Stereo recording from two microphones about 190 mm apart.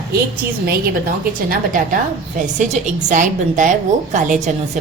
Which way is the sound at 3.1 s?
40° right (ahead or behind).